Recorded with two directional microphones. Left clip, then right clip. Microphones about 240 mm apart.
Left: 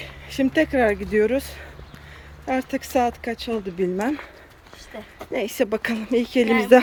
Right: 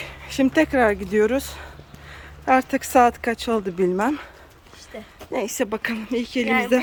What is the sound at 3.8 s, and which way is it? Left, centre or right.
Speech, centre.